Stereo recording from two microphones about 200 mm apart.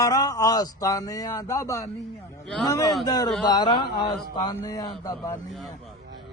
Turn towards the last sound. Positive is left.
turn(degrees=20)  # may be behind; listen again after turning